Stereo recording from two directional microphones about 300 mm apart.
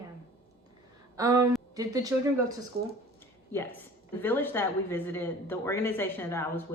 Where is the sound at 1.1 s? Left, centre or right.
Centre.